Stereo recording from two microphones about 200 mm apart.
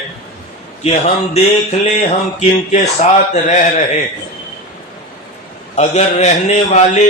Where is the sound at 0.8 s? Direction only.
30° left (ahead or behind).